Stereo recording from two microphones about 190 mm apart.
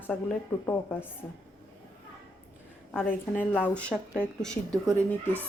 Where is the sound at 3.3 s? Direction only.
5° left (ahead or behind).